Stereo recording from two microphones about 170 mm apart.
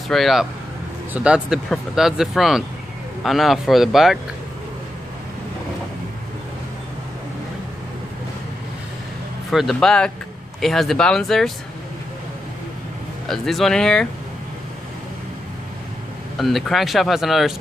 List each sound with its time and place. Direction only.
0.1 s speech: centre (ahead or behind)
9.5 s speech: centre (ahead or behind)
13.3 s speech: centre (ahead or behind)
16.3 s speech: centre (ahead or behind)